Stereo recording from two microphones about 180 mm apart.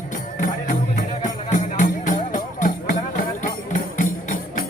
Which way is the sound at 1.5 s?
45° left (ahead or behind).